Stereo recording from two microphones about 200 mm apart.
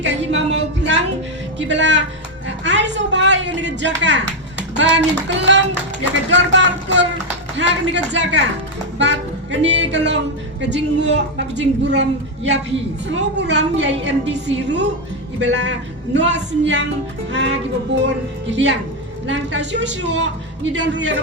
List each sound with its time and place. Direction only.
0.0 s a sound: 65° right (ahead or behind)
1.5 s a woman's voice: 65° right (ahead or behind)
9.0 s music: 65° right (ahead or behind)
10.6 s a woman's voice: 60° right (ahead or behind)